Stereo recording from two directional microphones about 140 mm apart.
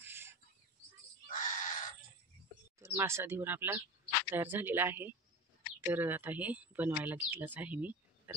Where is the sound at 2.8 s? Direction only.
20° right (ahead or behind).